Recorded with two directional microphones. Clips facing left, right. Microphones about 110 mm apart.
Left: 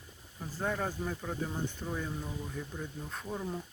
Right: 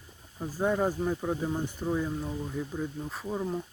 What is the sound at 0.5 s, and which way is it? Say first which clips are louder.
Speech: right 7 dB; 15° right (ahead or behind).